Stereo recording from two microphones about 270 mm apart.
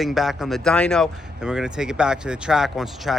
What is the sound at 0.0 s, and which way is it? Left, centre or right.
Speech, centre.